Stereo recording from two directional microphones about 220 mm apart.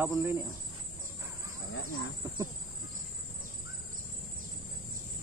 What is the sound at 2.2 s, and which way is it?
Speech, 15° right (ahead or behind).